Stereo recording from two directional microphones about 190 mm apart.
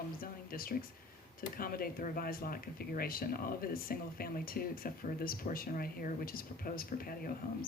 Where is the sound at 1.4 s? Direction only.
50° left (ahead or behind).